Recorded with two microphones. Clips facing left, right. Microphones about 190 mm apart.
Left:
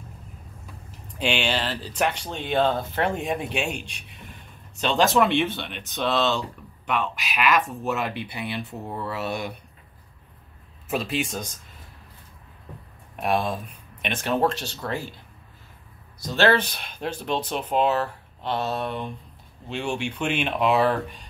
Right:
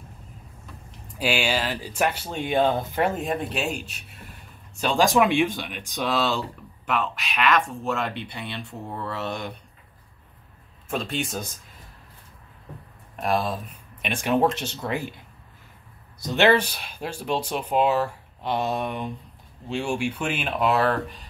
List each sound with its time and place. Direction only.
1.0 s speech: 5° right (ahead or behind); by 9.5 s 10° left (ahead or behind)
10.9 s speech: 5° left (ahead or behind)
13.1 s speech: centre (ahead or behind)
14.0 s speech: 10° right (ahead or behind)
16.3 s speech: 15° right (ahead or behind)